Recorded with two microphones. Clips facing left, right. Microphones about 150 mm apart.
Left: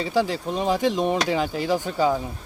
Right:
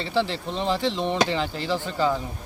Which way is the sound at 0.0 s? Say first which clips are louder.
Left 2 dB; 10° left (ahead or behind).